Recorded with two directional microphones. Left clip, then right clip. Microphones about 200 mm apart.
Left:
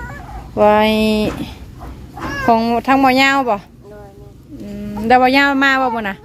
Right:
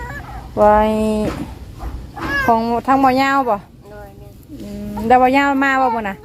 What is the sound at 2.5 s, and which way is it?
Speech, 20° left (ahead or behind).